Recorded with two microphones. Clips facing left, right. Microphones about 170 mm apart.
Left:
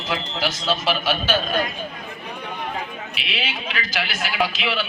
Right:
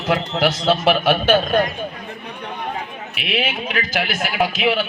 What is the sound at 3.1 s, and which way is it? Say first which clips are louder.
A man's voice: right 9 dB; 55° right (ahead or behind).